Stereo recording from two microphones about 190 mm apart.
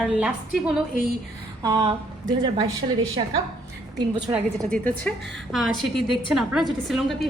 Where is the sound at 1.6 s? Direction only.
25° right (ahead or behind).